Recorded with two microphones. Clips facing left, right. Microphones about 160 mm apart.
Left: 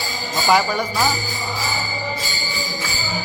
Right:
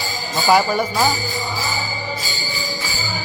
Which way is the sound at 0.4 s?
5° right (ahead or behind).